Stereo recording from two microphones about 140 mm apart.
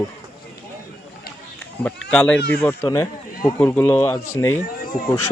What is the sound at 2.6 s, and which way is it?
Speech, 20° left (ahead or behind).